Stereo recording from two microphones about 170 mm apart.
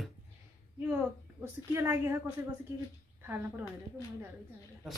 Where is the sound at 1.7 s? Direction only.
15° right (ahead or behind).